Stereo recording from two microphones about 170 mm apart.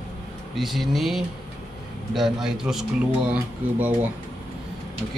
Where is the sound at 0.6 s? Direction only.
Centre (ahead or behind).